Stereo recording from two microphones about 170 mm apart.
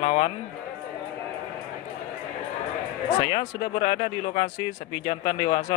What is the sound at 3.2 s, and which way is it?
Speech, 25° left (ahead or behind).